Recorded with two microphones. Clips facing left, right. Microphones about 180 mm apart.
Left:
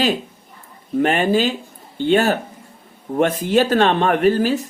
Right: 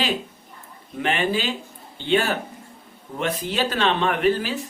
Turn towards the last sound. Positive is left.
turn(degrees=45)  # may be behind; listen again after turning